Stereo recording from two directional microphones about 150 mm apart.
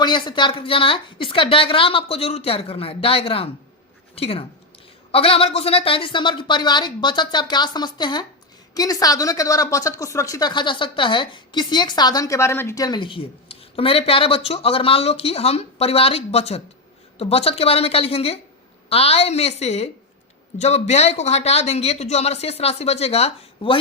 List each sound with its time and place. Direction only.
0.0 s speech: 30° left (ahead or behind)